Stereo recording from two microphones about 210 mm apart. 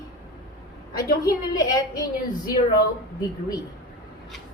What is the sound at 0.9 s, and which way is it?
A woman's voice, 15° left (ahead or behind).